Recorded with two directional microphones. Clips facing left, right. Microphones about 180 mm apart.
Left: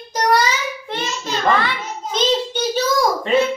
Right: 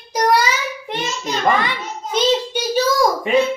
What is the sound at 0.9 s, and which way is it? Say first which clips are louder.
A child's voice: right 1 dB; 15° right (ahead or behind).